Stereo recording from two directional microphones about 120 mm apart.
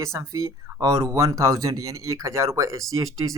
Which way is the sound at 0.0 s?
25° right (ahead or behind).